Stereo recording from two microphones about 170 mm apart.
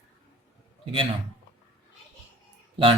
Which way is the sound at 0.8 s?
30° right (ahead or behind).